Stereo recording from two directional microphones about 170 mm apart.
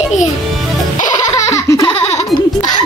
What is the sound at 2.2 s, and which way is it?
Baby laughter, 25° left (ahead or behind).